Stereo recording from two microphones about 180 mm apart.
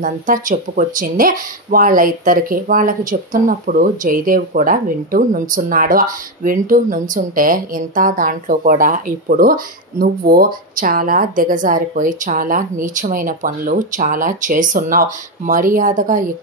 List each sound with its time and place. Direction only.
0.0 s speech: 50° right (ahead or behind)